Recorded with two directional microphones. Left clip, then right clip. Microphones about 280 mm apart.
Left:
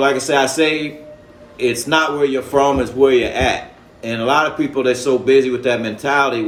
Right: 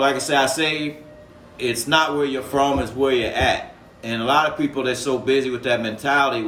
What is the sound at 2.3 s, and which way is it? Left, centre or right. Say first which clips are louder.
Speech: left 5 dB; centre.